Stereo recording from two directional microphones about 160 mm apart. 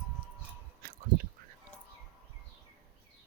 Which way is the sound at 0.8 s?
70° right (ahead or behind).